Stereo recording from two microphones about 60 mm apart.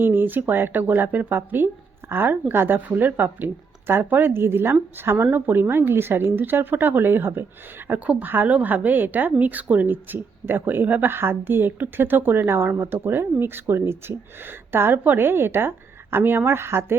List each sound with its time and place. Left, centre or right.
0.0 s speech: right
7.9 s speech: right